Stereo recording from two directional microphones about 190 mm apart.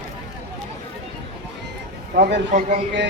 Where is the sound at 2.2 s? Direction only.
65° right (ahead or behind).